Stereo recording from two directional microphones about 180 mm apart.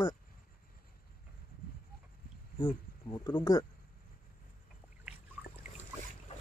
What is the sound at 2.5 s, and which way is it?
Speech, 20° left (ahead or behind).